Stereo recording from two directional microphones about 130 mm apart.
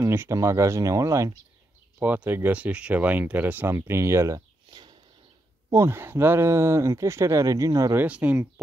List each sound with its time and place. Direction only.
0.0 s speech: 20° right (ahead or behind)
2.0 s speech: 15° right (ahead or behind)
5.7 s speech: 20° right (ahead or behind)
8.0 s speech: 10° right (ahead or behind)